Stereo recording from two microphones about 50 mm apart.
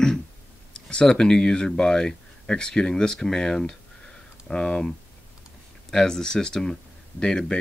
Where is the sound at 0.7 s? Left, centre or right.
Centre.